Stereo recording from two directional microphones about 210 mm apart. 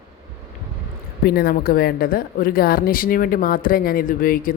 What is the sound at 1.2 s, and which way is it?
Speech, 45° left (ahead or behind).